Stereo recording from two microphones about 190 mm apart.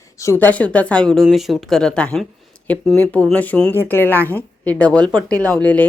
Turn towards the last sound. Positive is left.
turn(degrees=10)  # may be behind; listen again after turning